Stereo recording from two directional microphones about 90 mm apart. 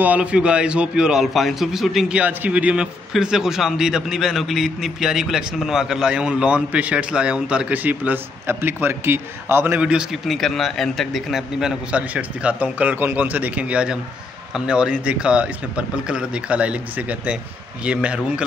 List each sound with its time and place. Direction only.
0.0 s a man's voice: 15° right (ahead or behind)
2.1 s a man's voice: 15° right (ahead or behind)
9.8 s a man's voice: 10° right (ahead or behind)
10.3 s a man's voice: centre (ahead or behind)